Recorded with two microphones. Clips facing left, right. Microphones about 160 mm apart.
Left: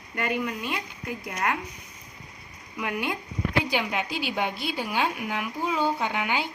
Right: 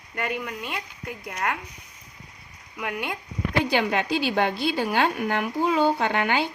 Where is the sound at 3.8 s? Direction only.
75° right (ahead or behind).